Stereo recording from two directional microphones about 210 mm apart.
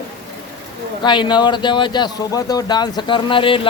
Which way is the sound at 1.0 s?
20° left (ahead or behind).